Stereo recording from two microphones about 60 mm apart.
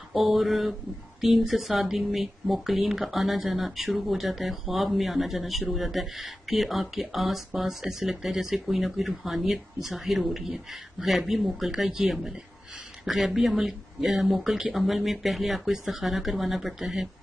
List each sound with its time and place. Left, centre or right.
0.1 s speech: centre